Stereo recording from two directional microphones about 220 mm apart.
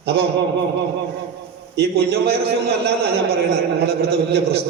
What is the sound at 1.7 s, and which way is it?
A man's voice, 45° right (ahead or behind).